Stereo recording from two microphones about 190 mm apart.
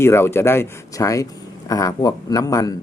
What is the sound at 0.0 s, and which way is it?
Speech, 15° left (ahead or behind).